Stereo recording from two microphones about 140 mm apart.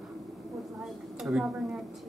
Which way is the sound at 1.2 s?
5° right (ahead or behind).